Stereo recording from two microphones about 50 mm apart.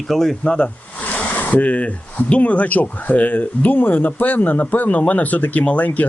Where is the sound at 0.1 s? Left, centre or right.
Centre.